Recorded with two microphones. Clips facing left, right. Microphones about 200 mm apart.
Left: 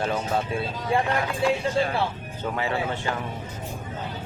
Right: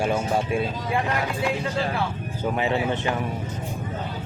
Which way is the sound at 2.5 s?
20° right (ahead or behind).